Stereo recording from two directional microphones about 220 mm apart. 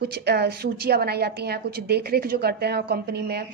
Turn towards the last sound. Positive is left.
turn(degrees=-45)  # may be behind; listen again after turning